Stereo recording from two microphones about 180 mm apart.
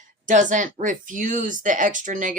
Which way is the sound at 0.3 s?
45° right (ahead or behind).